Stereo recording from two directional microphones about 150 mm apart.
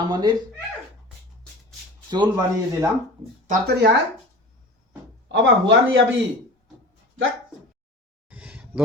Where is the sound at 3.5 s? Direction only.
90° right.